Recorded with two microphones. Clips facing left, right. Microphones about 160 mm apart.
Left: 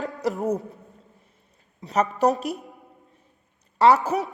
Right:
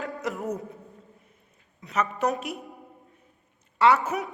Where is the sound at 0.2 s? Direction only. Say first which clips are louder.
Left 8 dB; 40° left (ahead or behind).